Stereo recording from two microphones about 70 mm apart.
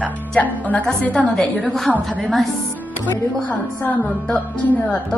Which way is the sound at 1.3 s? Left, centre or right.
Centre.